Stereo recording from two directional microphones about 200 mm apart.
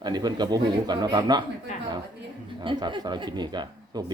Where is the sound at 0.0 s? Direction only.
20° right (ahead or behind).